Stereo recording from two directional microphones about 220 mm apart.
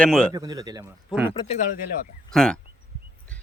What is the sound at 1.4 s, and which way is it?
Speech, 30° left (ahead or behind).